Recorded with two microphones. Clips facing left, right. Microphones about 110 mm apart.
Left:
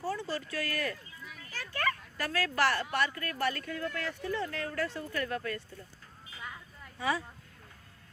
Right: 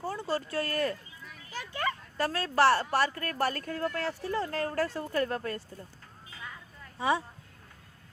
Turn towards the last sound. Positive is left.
turn(degrees=-25)  # may be behind; listen again after turning